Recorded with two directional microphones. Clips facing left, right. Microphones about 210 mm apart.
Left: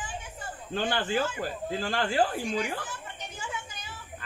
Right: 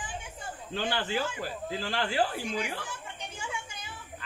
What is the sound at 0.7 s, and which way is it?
Speech, 50° left (ahead or behind).